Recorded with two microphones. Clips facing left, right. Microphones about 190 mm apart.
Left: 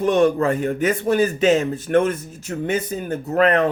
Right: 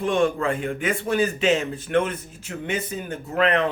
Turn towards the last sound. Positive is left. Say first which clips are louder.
# left 4 dB
turn(degrees=40)  # may be behind; listen again after turning